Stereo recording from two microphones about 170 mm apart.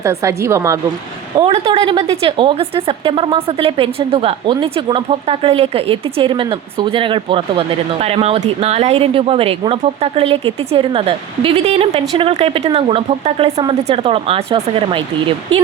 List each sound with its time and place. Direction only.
0.0 s a woman's voice: 15° right (ahead or behind)
1.5 s a woman's voice: 35° right (ahead or behind)